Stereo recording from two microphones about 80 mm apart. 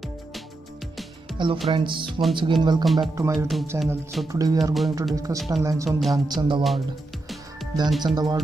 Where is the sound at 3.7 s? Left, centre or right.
Right.